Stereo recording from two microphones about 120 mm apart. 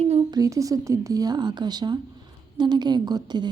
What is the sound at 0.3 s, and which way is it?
A woman's voice, 30° right (ahead or behind).